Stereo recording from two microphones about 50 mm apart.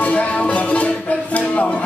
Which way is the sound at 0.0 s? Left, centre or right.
Left.